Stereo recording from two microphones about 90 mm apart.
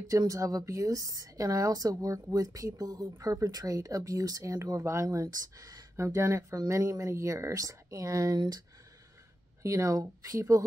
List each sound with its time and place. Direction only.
0.1 s speech: 40° right (ahead or behind)
5.9 s speech: 30° right (ahead or behind)